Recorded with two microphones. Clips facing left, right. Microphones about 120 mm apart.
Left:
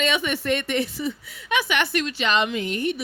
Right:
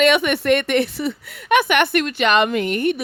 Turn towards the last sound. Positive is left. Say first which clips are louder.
# right 6 dB
turn(degrees=-60)  # may be behind; listen again after turning